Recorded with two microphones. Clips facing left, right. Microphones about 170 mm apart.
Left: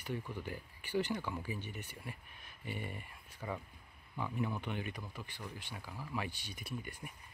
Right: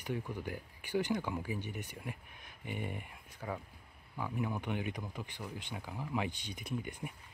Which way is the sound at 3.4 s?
5° right (ahead or behind).